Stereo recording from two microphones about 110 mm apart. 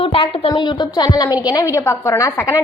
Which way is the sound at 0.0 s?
60° left (ahead or behind).